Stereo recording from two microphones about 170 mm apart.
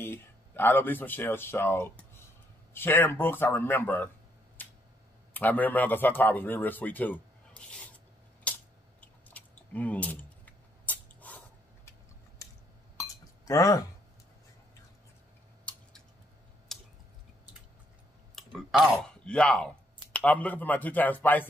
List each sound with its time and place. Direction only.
0.0 s a man's voice: 15° left (ahead or behind)
5.3 s a man's voice: 10° left (ahead or behind)
9.0 s a sound: 10° left (ahead or behind)
13.5 s speech: 20° left (ahead or behind)
16.7 s a sound: centre (ahead or behind)
18.3 s speech: centre (ahead or behind)